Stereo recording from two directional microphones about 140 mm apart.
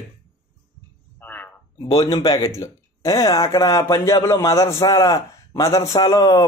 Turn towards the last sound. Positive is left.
turn(degrees=20)  # may be behind; listen again after turning